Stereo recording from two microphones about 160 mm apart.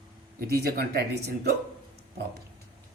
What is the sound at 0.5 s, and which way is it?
Speech, 80° right.